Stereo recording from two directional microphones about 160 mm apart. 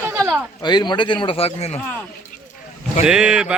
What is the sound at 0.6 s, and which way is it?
Speech, 25° left (ahead or behind).